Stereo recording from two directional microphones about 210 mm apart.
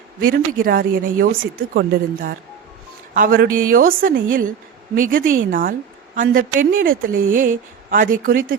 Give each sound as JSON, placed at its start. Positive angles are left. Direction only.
{"t": 0.2, "sound": "a woman's voice", "side_deg": -45}